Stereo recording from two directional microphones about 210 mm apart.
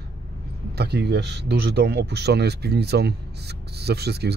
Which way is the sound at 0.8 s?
50° right (ahead or behind).